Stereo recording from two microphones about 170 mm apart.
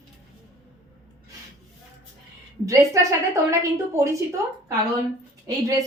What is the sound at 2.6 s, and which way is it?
A woman's voice, 20° right (ahead or behind).